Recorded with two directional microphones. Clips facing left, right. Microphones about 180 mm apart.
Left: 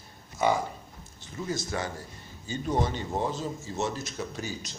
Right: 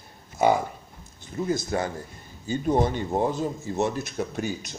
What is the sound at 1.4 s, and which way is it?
A man's voice, 50° right (ahead or behind).